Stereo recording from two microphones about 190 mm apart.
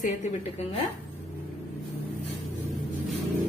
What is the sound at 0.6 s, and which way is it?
Speech, 35° left (ahead or behind).